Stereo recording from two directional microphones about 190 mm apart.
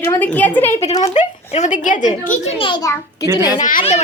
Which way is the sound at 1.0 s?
35° left (ahead or behind).